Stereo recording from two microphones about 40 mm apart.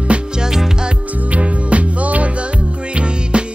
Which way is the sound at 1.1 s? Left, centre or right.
Right.